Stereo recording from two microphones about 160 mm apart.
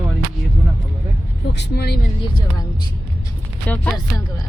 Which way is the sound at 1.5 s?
90° left.